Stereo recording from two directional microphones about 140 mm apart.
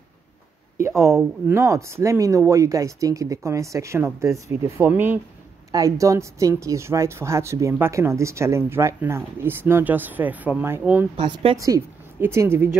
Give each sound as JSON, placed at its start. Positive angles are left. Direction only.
{"t": 0.7, "sound": "speech", "side_deg": -20}
{"t": 11.1, "sound": "speech", "side_deg": -35}